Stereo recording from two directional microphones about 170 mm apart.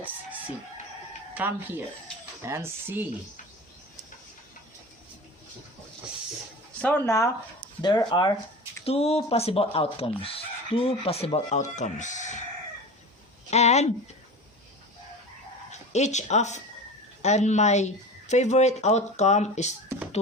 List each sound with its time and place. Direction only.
1.3 s speech: 10° right (ahead or behind)
6.8 s speech: 15° left (ahead or behind)
7.8 s speech: 25° left (ahead or behind); by 12.4 s 45° left (ahead or behind)
13.5 s speech: 40° left (ahead or behind)
15.7 s speech: 40° left (ahead or behind)